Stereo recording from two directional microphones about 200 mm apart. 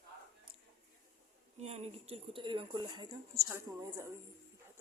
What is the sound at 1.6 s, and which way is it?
Speech, 30° right (ahead or behind).